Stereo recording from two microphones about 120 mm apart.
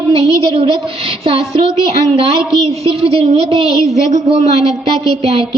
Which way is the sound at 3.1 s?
55° right (ahead or behind).